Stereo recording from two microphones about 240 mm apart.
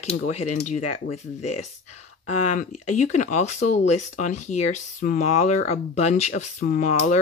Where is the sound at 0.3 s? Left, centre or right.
Left.